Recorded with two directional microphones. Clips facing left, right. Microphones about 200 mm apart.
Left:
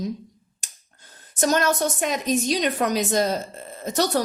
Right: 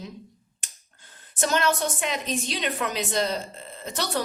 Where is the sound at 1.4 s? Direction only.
40° left (ahead or behind).